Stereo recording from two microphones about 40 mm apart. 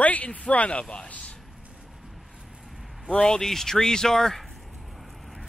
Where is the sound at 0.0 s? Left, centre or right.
Left.